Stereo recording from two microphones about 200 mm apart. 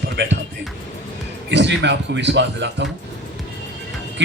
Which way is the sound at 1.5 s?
60° right (ahead or behind).